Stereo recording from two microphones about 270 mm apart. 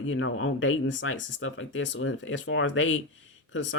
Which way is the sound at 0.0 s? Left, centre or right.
Left.